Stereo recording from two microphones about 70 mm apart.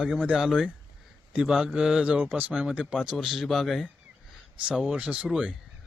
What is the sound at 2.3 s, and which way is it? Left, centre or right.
Speech, right.